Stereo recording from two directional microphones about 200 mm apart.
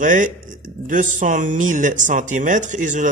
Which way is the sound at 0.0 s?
40° right (ahead or behind).